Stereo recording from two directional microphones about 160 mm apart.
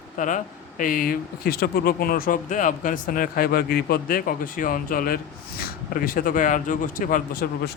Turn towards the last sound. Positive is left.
turn(degrees=60)  # may be behind; listen again after turning